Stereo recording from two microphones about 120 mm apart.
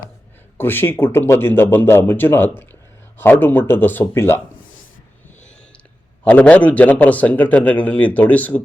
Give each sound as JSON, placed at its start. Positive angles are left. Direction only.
{"t": 0.5, "sound": "a man's voice", "side_deg": 20}
{"t": 6.2, "sound": "a man's voice", "side_deg": 10}